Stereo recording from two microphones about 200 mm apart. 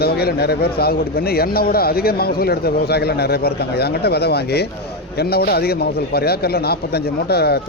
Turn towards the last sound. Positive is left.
turn(degrees=55)  # may be behind; listen again after turning